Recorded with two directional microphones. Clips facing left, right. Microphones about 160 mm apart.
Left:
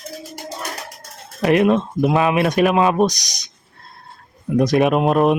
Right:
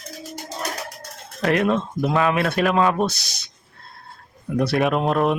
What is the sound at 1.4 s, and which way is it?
Speech, 15° left (ahead or behind).